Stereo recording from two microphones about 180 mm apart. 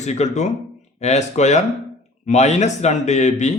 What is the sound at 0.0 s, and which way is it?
Speech, 40° left (ahead or behind).